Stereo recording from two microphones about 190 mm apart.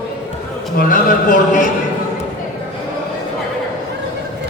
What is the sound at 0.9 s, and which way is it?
Speech, 45° left (ahead or behind).